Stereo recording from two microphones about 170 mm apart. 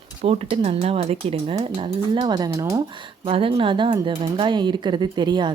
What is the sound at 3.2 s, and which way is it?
Speech, 35° right (ahead or behind).